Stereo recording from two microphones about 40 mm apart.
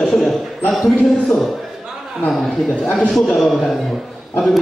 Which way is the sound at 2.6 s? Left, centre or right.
Left.